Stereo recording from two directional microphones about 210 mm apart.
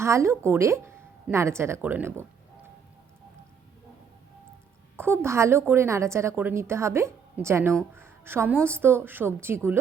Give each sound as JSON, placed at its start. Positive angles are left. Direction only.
{"t": 0.0, "sound": "speech", "side_deg": -15}
{"t": 4.9, "sound": "a woman's voice", "side_deg": -10}